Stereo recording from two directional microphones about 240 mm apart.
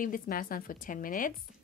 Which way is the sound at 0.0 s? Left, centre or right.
Left.